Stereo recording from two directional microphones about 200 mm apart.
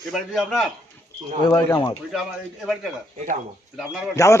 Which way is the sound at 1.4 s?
20° left (ahead or behind).